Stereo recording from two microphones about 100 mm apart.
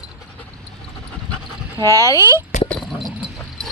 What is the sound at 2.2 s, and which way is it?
Speech, 25° right (ahead or behind).